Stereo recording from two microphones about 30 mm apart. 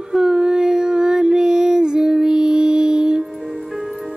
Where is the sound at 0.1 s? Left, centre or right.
Right.